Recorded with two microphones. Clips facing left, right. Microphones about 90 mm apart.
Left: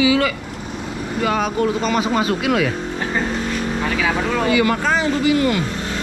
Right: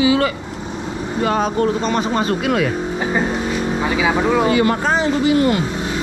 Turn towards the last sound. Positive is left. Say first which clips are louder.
# right 2 dB
turn(degrees=-30)  # may be behind; listen again after turning